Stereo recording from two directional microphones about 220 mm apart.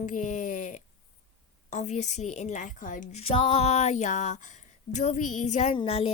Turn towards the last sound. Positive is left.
turn(degrees=25)  # may be behind; listen again after turning